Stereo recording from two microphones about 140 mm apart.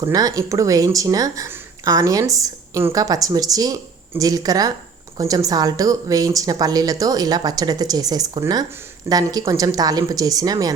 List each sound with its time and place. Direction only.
0.0 s speech: 25° right (ahead or behind)